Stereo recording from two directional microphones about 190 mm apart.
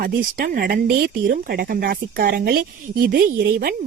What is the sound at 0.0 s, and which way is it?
Speech, 50° right (ahead or behind).